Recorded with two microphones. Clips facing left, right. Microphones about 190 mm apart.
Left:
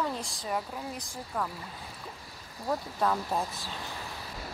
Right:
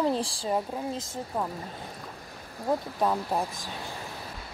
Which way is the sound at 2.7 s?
15° right (ahead or behind).